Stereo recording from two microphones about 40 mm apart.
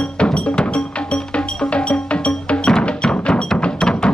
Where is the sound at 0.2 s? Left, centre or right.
Left.